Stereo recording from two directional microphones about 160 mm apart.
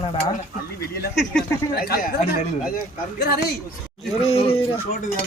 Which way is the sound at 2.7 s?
75° left (ahead or behind).